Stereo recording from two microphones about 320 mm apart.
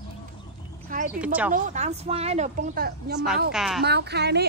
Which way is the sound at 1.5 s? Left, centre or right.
Right.